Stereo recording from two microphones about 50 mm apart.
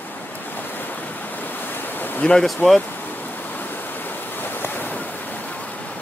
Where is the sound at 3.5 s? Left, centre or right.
Left.